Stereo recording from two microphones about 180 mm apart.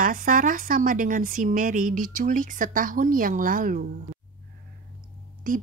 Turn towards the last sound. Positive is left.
turn(degrees=-50)  # may be behind; listen again after turning